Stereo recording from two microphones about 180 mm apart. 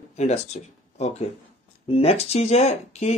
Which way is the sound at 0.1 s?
35° left (ahead or behind).